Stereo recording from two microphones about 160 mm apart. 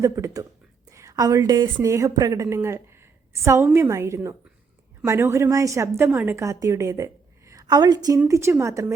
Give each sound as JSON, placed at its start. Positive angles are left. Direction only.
{"t": 0.0, "sound": "a woman's voice", "side_deg": -20}